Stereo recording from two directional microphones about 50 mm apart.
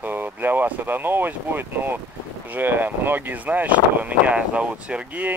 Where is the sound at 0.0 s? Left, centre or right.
Right.